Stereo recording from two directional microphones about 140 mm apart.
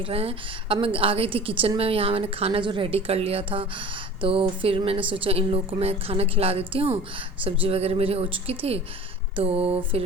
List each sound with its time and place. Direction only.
0.0 s a woman's voice: 45° right (ahead or behind)